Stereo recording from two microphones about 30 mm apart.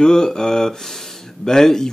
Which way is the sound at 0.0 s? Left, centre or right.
Left.